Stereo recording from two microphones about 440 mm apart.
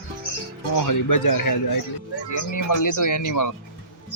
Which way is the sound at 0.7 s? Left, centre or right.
Left.